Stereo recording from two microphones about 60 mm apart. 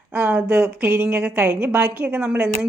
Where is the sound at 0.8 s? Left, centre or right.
Right.